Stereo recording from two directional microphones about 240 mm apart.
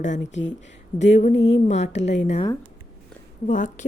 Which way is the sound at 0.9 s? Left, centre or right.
Left.